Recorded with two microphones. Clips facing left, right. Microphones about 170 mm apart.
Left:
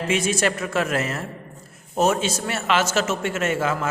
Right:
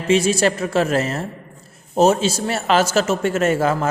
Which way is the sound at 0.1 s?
30° right (ahead or behind).